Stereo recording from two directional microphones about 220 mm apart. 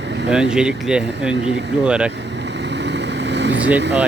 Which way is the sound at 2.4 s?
50° right (ahead or behind).